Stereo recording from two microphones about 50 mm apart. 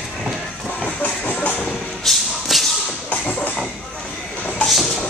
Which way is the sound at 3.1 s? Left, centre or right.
Left.